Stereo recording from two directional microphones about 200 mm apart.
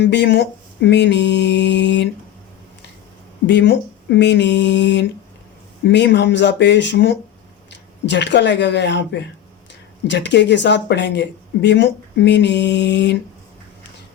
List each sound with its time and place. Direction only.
0.0 s speech: 60° left (ahead or behind)
3.4 s speech: 60° left (ahead or behind)